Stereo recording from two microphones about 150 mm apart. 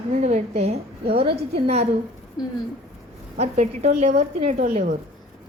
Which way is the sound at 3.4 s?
45° right (ahead or behind).